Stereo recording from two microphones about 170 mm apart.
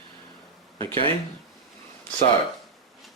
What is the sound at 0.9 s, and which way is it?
Speech, 35° right (ahead or behind).